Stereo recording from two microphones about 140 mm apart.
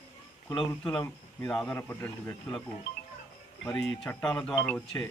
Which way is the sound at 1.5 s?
5° left (ahead or behind).